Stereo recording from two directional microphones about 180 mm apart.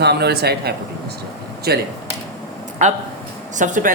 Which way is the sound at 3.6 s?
45° right (ahead or behind).